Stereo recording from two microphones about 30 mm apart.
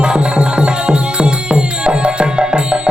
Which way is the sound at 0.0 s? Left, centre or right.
Right.